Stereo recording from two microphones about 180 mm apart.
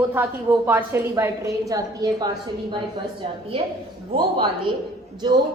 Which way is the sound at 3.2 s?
30° right (ahead or behind).